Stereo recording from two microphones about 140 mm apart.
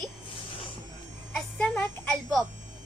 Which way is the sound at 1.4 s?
10° left (ahead or behind).